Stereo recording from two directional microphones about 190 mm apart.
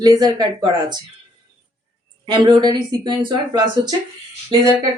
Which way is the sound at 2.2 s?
25° right (ahead or behind).